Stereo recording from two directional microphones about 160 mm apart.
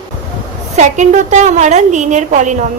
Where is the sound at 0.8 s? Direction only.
50° right (ahead or behind).